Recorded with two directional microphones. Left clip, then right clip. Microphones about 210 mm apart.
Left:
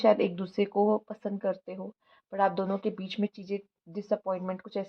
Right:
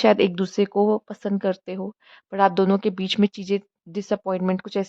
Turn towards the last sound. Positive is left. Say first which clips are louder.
# right 9 dB
turn(degrees=-40)  # may be behind; listen again after turning